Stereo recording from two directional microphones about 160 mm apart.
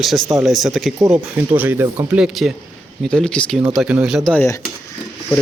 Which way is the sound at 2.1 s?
5° right (ahead or behind).